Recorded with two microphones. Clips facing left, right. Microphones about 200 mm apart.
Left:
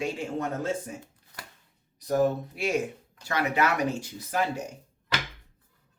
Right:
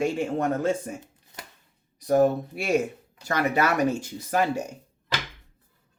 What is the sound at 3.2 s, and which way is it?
Speech, 45° right (ahead or behind).